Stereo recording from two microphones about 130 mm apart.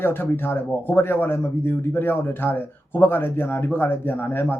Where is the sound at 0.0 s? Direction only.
15° left (ahead or behind).